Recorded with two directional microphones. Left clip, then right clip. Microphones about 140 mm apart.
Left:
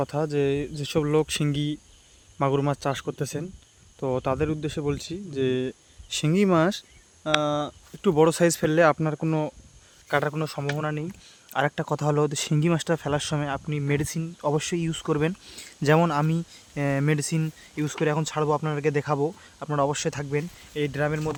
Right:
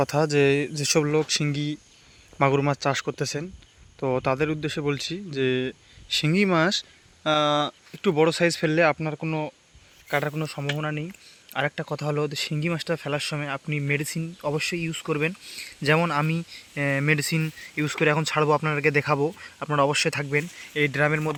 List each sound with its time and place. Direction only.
0.0 s speech: 5° right (ahead or behind)
1.0 s speech: 10° left (ahead or behind)
6.1 s speech: 25° left (ahead or behind)
7.4 s speech: centre (ahead or behind)
8.1 s speech: 30° left (ahead or behind)
10.3 s speech: 60° left (ahead or behind); by 21.3 s centre (ahead or behind)